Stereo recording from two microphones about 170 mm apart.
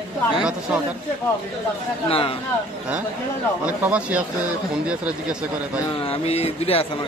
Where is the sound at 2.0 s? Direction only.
35° left (ahead or behind).